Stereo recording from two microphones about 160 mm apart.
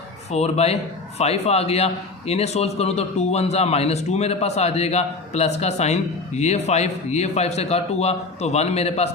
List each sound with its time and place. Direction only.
0.3 s a man's voice: 40° left (ahead or behind)